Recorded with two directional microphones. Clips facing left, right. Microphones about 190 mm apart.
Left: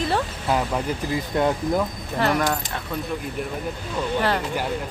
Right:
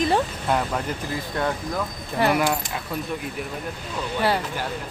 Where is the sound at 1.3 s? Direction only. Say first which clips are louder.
Left 5 dB; 20° left (ahead or behind).